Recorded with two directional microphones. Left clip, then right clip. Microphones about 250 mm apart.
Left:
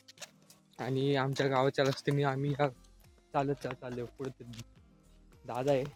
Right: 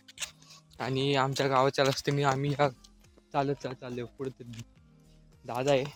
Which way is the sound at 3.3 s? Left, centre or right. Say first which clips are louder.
Right 2 dB; right.